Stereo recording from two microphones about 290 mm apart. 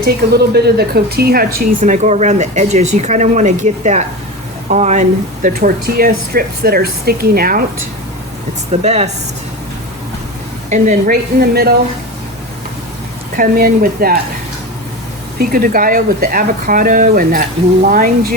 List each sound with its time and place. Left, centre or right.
0.0 s a woman's voice: right
8.7 s a woman's voice: right
10.7 s speech: right
13.3 s a woman's voice: right
15.4 s a woman's voice: right